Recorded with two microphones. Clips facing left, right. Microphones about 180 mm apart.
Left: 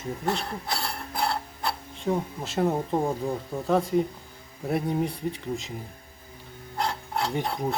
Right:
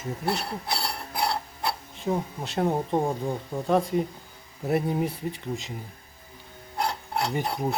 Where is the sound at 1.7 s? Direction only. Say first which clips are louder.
Left 1 dB; centre (ahead or behind).